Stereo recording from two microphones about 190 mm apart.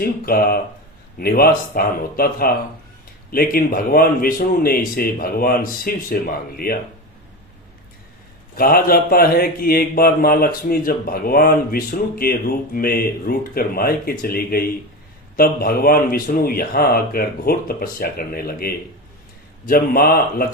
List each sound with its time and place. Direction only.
0.0 s speech: 50° left (ahead or behind)
8.5 s speech: 50° left (ahead or behind)